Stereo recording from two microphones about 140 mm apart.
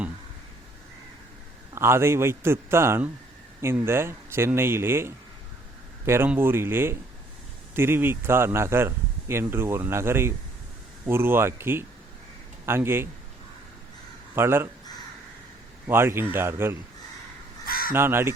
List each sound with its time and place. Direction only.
1.7 s speech: 20° right (ahead or behind)
14.3 s speech: 15° right (ahead or behind)
15.9 s speech: 15° right (ahead or behind)
17.7 s crow: 90° left
17.9 s speech: 15° right (ahead or behind)